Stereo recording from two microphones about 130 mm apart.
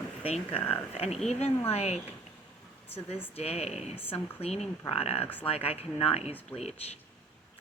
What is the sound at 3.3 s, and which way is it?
Speech, 50° left (ahead or behind).